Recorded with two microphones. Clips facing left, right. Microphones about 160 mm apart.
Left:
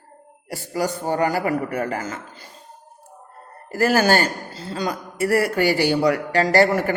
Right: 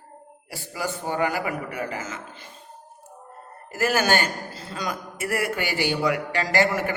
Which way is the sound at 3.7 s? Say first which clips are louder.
Left 5 dB; 35° left (ahead or behind).